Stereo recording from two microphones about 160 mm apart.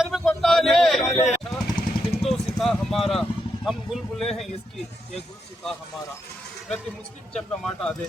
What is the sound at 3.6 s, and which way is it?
Speech, centre (ahead or behind).